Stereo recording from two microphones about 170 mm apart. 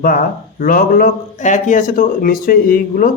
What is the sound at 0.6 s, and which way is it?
A man's voice, 60° left (ahead or behind).